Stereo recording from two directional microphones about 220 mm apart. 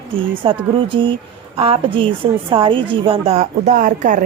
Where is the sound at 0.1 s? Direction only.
25° right (ahead or behind).